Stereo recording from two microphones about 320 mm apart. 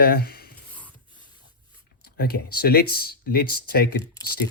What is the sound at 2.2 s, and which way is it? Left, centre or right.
Speech, left.